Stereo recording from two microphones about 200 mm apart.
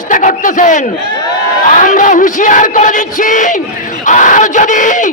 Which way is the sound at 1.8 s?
40° left (ahead or behind).